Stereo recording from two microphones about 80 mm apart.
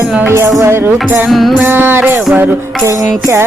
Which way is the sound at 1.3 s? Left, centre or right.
Centre.